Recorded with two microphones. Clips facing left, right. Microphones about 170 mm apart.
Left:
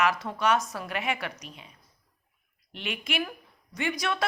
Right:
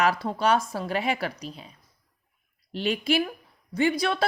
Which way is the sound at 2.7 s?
35° right (ahead or behind).